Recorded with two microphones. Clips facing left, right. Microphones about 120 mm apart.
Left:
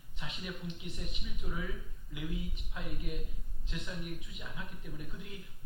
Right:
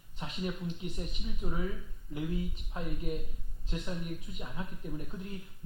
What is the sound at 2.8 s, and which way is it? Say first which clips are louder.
Speech: right 5 dB; 40° right (ahead or behind).